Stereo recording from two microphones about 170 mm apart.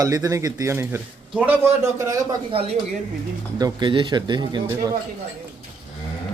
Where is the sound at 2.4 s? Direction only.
35° right (ahead or behind).